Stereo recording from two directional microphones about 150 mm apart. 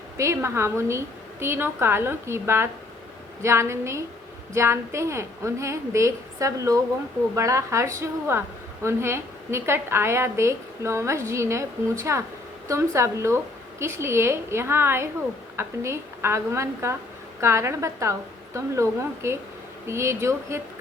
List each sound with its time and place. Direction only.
0.2 s a woman's voice: 20° right (ahead or behind)